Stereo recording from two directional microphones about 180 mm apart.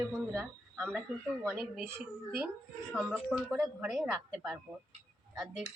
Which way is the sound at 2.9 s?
Centre (ahead or behind).